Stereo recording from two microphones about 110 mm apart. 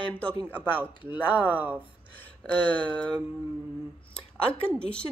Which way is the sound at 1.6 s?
15° right (ahead or behind).